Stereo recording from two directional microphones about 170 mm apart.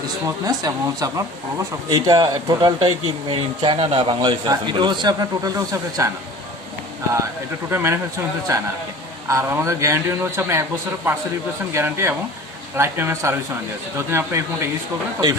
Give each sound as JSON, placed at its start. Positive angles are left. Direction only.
{"t": 0.3, "sound": "speech", "side_deg": -20}
{"t": 7.7, "sound": "a man's voice", "side_deg": -15}